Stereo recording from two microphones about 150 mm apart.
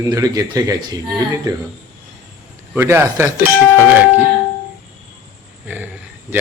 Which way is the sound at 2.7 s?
15° right (ahead or behind).